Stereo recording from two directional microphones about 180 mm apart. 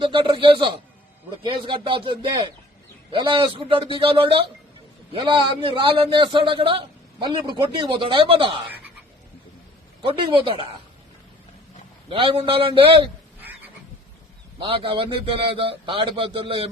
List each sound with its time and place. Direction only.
0.0 s a man's voice: 30° right (ahead or behind)
10.0 s a man's voice: 30° right (ahead or behind)
12.0 s a man's voice: 30° right (ahead or behind)
14.6 s a man's voice: 30° right (ahead or behind)